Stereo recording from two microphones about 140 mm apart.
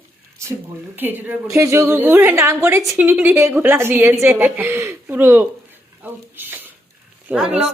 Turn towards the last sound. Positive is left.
turn(degrees=-10)  # may be behind; listen again after turning